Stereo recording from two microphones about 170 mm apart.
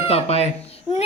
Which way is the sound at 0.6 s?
35° left (ahead or behind).